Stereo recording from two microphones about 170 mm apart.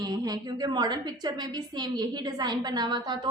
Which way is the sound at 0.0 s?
20° right (ahead or behind).